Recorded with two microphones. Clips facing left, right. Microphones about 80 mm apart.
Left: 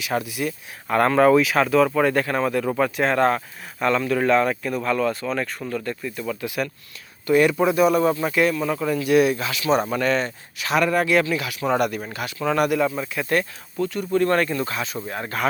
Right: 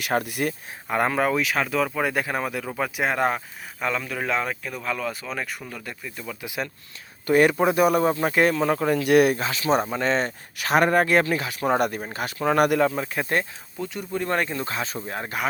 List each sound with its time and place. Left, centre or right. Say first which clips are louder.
0.0 s speech: even; right
0.9 s speech: left 6 dB; centre
6.4 s speech: left 3 dB; right
7.3 s speech: left 1 dB; right
9.4 s speech: left 1 dB; right
13.1 s speech: left 5 dB; right
13.7 s speech: left 7 dB; centre